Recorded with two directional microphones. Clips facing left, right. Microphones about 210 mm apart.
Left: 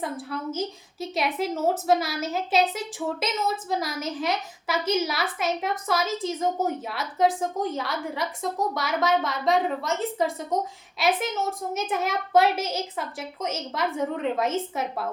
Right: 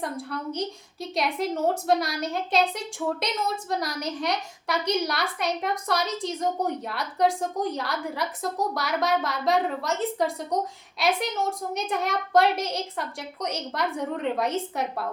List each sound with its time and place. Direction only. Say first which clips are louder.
0.0 s a woman's voice: left 1 dB; centre (ahead or behind)